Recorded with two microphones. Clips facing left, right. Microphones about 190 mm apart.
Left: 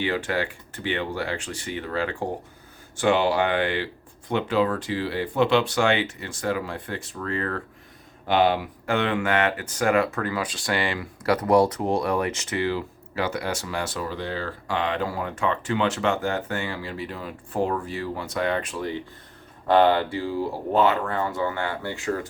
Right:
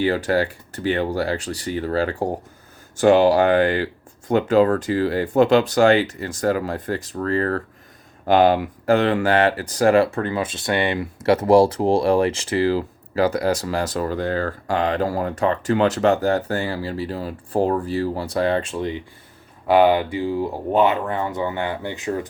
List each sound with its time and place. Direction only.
0.0 s speech: 40° right (ahead or behind); by 22.3 s 20° right (ahead or behind)